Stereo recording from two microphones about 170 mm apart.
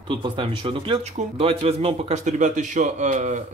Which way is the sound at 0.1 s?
30° right (ahead or behind).